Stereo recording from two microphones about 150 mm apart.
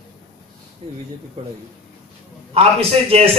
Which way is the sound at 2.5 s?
40° right (ahead or behind).